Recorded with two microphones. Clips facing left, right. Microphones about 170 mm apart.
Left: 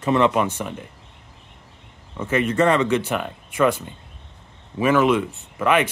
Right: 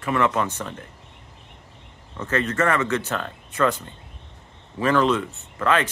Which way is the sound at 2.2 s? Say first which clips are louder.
Left 4 dB; 10° left (ahead or behind).